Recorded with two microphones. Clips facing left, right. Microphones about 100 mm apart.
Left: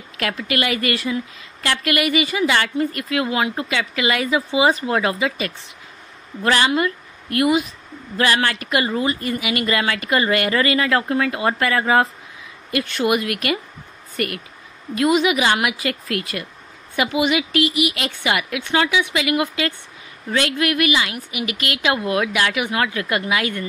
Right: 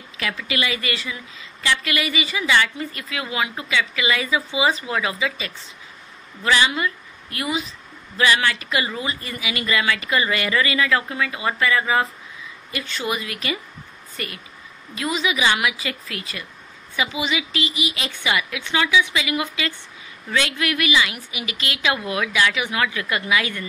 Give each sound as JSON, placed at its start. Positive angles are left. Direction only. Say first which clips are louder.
{"t": 0.2, "sound": "a woman's voice", "louder": "left 3 dB", "side_deg": 50}
{"t": 15.0, "sound": "a woman's voice", "louder": "left 6 dB", "side_deg": 55}